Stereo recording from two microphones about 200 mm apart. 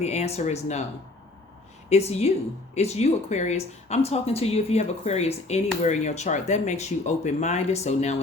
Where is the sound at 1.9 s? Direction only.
30° left (ahead or behind).